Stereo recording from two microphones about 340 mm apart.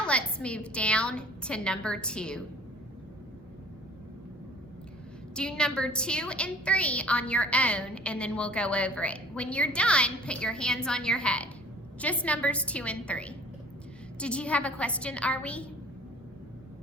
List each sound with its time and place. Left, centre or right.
0.0 s a woman's voice: centre
5.3 s a woman's voice: centre